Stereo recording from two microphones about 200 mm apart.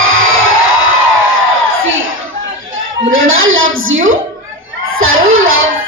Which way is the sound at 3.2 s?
85° right.